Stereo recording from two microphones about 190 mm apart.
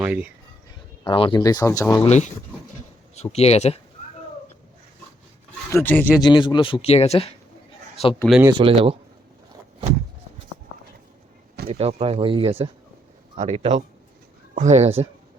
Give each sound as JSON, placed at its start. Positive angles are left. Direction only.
{"t": 0.0, "sound": "speech", "side_deg": -10}
{"t": 1.0, "sound": "speech", "side_deg": 25}
{"t": 2.0, "sound": "speech", "side_deg": 35}
{"t": 3.3, "sound": "speech", "side_deg": 35}
{"t": 5.7, "sound": "speech", "side_deg": 10}
{"t": 6.2, "sound": "speech", "side_deg": 25}
{"t": 8.4, "sound": "speech", "side_deg": -25}
{"t": 11.7, "sound": "speech", "side_deg": -35}